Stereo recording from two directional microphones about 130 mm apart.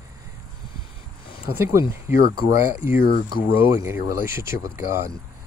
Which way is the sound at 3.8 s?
20° right (ahead or behind).